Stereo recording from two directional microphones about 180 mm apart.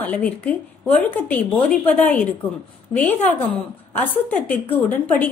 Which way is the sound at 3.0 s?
10° left (ahead or behind).